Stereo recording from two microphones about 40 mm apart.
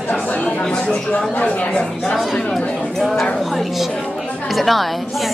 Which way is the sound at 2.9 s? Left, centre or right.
Centre.